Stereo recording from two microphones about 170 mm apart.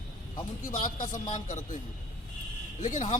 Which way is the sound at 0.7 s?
50° left (ahead or behind).